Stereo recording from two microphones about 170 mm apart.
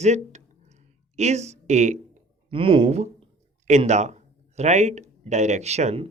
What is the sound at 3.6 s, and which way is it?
Speech, 45° right (ahead or behind).